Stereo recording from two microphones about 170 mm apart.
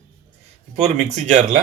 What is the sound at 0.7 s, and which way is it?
Speech, 40° right (ahead or behind).